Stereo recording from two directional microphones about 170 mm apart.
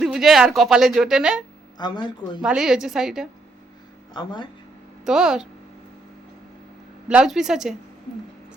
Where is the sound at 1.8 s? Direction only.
25° left (ahead or behind).